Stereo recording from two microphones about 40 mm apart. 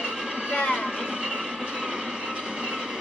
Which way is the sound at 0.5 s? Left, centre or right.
Left.